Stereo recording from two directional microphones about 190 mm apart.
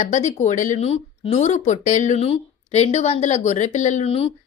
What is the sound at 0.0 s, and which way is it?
Speech, 40° left (ahead or behind).